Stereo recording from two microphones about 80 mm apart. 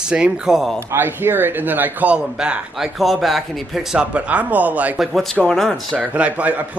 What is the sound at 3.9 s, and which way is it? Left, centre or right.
Speech, centre.